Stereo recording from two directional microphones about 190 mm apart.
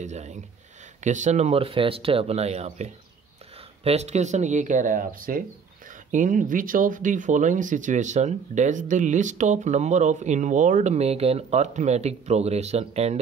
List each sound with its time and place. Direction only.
0.0 s speech: 40° right (ahead or behind)